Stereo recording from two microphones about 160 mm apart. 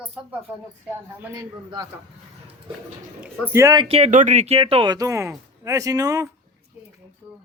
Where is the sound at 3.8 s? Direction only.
40° right (ahead or behind).